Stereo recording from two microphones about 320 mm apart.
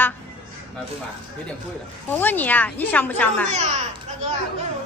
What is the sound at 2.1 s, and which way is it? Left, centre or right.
A woman's voice, centre.